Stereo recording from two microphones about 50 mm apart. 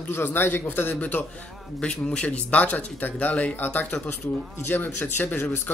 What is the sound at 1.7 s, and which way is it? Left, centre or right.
Speech, centre.